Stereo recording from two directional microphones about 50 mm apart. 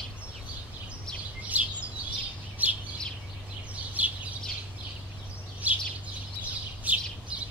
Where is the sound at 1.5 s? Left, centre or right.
Right.